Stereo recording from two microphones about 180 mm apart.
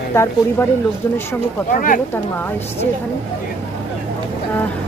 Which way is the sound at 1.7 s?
50° left (ahead or behind).